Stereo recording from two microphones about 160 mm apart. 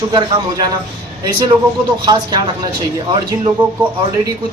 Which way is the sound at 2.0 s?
25° right (ahead or behind).